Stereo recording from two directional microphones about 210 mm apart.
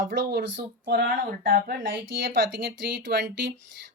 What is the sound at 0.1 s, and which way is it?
Speech, 55° right (ahead or behind).